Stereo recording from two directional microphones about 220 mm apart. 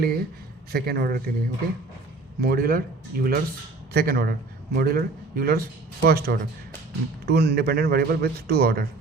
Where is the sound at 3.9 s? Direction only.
45° right (ahead or behind).